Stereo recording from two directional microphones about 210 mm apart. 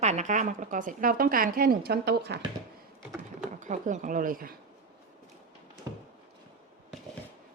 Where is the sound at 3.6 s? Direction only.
35° right (ahead or behind).